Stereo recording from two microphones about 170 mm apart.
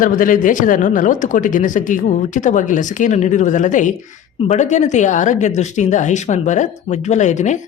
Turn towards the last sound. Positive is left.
turn(degrees=45)  # may be behind; listen again after turning